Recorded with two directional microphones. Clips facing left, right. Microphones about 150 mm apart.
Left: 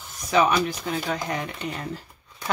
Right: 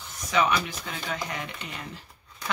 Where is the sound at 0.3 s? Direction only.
40° left (ahead or behind).